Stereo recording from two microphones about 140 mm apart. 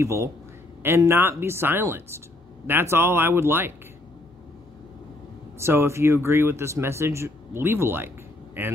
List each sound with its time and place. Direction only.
0.0 s speech: 20° right (ahead or behind)
5.6 s speech: 20° right (ahead or behind)